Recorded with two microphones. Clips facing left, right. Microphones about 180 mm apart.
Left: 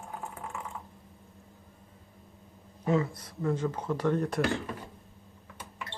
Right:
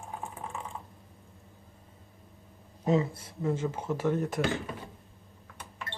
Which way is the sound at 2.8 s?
20° right (ahead or behind).